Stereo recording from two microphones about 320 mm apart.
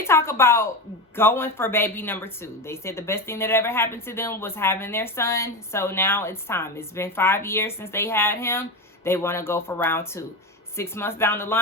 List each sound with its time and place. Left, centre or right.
0.0 s speech: centre